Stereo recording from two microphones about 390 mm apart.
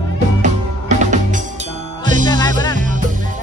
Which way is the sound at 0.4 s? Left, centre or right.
Centre.